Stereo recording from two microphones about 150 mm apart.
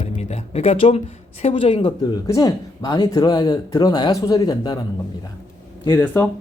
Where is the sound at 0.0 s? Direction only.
45° left (ahead or behind).